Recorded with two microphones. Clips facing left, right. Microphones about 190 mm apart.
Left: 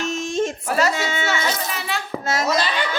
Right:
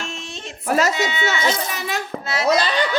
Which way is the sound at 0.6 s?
40° right (ahead or behind).